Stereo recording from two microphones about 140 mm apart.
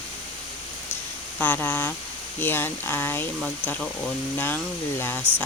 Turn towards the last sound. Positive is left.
turn(degrees=15)  # may be behind; listen again after turning